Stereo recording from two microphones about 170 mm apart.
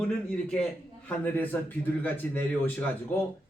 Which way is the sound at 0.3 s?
5° left (ahead or behind).